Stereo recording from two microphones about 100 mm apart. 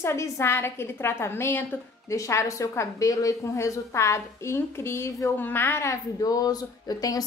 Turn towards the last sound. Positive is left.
turn(degrees=40)  # may be behind; listen again after turning